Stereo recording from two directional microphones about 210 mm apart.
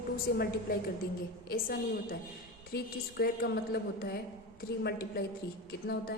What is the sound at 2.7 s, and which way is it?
A woman's voice, 50° left (ahead or behind).